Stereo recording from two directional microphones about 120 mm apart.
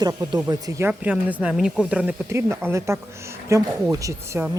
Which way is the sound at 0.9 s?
10° right (ahead or behind).